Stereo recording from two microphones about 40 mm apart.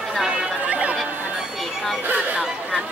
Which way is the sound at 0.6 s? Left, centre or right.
Right.